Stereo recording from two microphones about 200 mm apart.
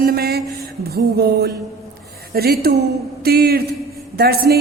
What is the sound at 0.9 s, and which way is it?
A woman's voice, 50° right (ahead or behind).